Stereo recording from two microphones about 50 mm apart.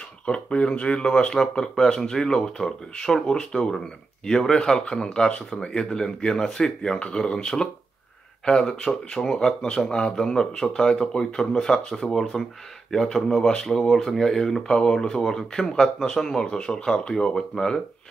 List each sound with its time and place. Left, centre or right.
0.2 s speech: left
12.2 s speech: centre